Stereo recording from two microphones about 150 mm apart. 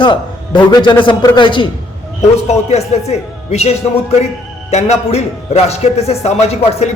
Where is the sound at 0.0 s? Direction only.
30° left (ahead or behind).